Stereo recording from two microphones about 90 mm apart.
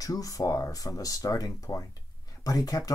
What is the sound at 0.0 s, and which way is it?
Speech, 40° left (ahead or behind).